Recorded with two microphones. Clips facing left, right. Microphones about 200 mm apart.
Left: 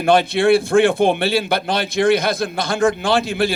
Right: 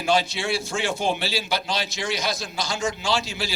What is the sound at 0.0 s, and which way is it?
A man's voice, 55° left (ahead or behind).